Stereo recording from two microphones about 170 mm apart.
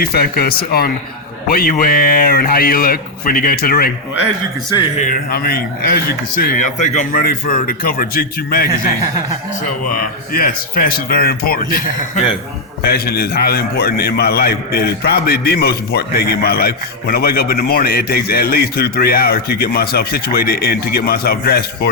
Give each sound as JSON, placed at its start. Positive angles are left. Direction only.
{"t": 0.0, "sound": "a man's voice", "side_deg": 65}
{"t": 4.9, "sound": "a man's voice", "side_deg": 50}
{"t": 9.9, "sound": "a man's voice", "side_deg": 55}
{"t": 12.8, "sound": "a man's voice", "side_deg": 65}